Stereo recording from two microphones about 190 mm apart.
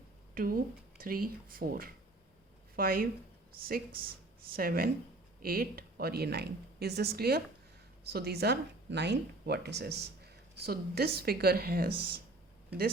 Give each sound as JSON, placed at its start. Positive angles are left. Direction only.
{"t": 0.3, "sound": "speech", "side_deg": -50}